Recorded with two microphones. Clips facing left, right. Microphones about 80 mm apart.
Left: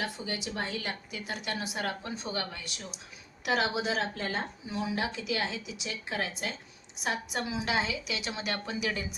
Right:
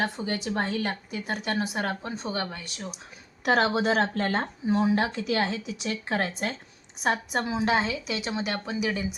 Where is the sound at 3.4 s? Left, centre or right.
Right.